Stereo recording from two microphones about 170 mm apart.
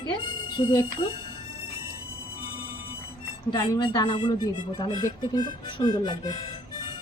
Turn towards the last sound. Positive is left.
turn(degrees=25)  # may be behind; listen again after turning